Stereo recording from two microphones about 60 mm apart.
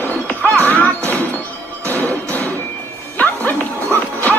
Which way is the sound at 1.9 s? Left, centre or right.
Left.